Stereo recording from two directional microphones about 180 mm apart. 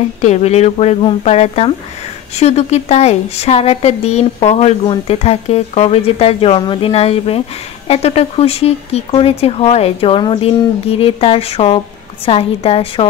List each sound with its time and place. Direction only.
0.2 s a woman's voice: 40° left (ahead or behind)